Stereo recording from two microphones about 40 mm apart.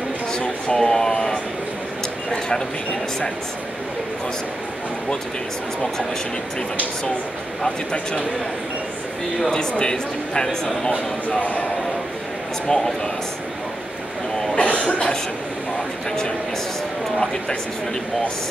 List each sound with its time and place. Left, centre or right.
0.3 s a sound: centre
9.5 s speech: centre
10.9 s speech: left
12.6 s speech: centre
14.6 s cough: left